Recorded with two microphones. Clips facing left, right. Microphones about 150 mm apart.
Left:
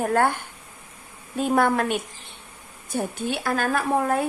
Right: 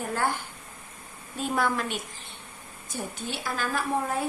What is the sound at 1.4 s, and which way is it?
A woman's voice, 55° left (ahead or behind).